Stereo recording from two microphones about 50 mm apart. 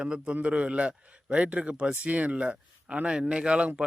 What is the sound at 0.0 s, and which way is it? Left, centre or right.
A man's voice, centre.